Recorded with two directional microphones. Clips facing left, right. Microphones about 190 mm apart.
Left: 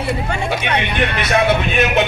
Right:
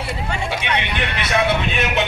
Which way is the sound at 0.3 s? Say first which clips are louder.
Left 3 dB; 50° left (ahead or behind).